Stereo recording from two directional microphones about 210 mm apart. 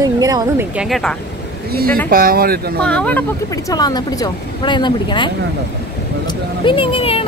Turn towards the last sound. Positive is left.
turn(degrees=25)  # may be behind; listen again after turning